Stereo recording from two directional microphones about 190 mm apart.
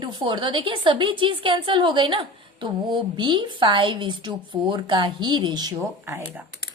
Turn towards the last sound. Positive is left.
turn(degrees=-10)  # may be behind; listen again after turning